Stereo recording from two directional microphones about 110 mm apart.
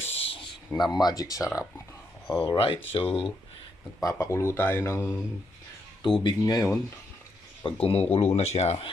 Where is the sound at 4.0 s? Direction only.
30° left (ahead or behind).